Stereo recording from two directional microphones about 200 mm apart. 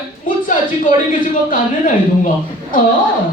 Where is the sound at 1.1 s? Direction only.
40° left (ahead or behind).